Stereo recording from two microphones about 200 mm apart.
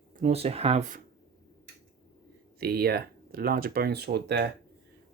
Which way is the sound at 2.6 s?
50° right (ahead or behind).